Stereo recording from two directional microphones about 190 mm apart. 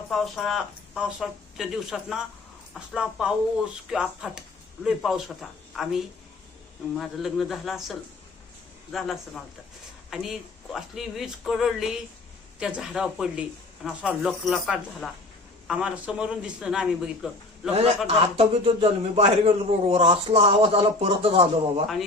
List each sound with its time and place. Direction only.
0.1 s speech: centre (ahead or behind)
18.3 s a man's voice: 30° right (ahead or behind)